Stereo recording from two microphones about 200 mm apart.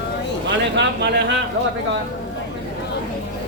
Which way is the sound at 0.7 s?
60° right (ahead or behind).